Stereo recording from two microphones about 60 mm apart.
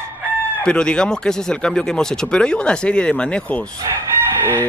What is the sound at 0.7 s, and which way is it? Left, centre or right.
Speech, centre.